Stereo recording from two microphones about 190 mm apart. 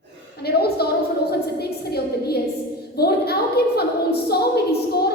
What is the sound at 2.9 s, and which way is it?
Speech, 55° left (ahead or behind).